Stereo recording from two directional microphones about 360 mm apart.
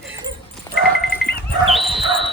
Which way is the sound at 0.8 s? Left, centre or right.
Centre.